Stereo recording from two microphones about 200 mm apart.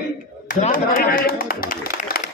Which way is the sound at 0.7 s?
45° left (ahead or behind).